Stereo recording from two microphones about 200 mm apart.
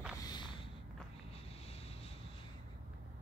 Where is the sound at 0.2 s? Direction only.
20° left (ahead or behind).